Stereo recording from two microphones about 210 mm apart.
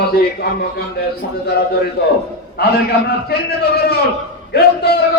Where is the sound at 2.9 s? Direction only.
50° left (ahead or behind).